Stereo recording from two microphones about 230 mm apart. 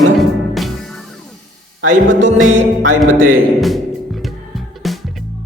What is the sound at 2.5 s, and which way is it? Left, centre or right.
Music, right.